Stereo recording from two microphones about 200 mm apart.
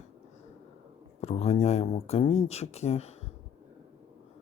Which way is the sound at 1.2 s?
30° left (ahead or behind).